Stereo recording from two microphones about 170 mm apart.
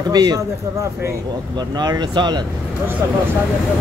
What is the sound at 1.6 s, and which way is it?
Speech, 25° right (ahead or behind).